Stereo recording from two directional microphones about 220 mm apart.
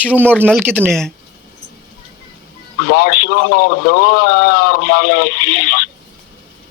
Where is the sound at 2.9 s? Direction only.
45° left (ahead or behind).